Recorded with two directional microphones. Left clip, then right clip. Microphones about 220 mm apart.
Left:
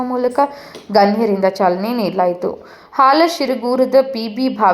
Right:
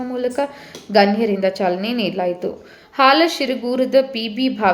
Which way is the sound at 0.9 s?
10° right (ahead or behind).